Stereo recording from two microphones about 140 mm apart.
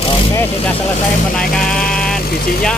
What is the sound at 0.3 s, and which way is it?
Speech, 15° left (ahead or behind).